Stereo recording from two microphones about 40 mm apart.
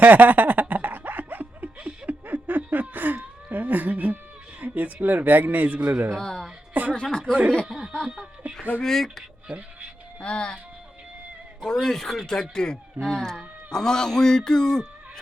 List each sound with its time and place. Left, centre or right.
0.0 s snicker: right
2.2 s a sound: right
3.5 s cat: right
4.6 s speech: right
6.1 s a man's voice: centre
7.3 s speech: right
8.0 s a sound: centre
8.8 s a man's voice: centre
10.2 s music: left
11.6 s a man's voice: centre